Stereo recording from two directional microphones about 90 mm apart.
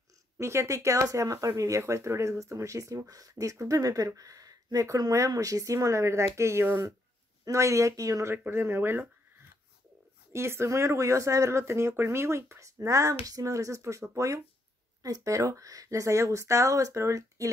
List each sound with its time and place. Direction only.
0.4 s speech: 30° right (ahead or behind)
10.3 s speech: 30° right (ahead or behind)